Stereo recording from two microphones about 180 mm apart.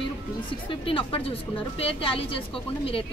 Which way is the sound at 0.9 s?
30° left (ahead or behind).